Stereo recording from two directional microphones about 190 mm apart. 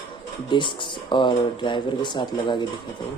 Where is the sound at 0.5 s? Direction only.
25° left (ahead or behind).